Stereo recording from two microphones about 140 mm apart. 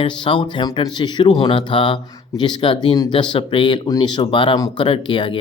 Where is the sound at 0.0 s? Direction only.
35° left (ahead or behind).